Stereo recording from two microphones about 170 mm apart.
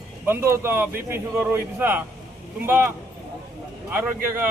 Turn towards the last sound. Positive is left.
turn(degrees=-15)  # may be behind; listen again after turning